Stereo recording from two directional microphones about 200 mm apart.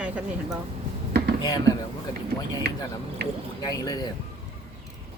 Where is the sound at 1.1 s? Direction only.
55° right (ahead or behind).